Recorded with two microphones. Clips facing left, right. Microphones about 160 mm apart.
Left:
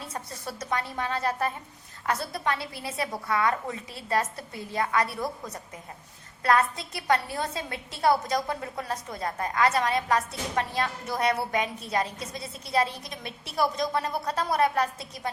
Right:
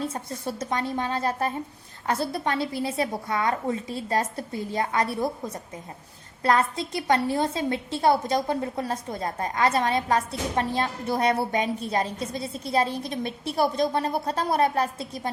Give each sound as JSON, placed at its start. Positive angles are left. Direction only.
{"t": 0.7, "sound": "a woman's voice", "side_deg": -25}